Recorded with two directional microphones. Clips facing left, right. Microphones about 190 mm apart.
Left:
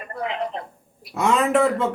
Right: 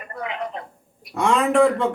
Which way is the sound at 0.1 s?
30° left (ahead or behind).